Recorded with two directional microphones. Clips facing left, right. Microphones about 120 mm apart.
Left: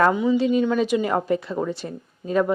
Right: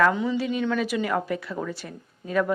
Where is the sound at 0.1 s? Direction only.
15° left (ahead or behind).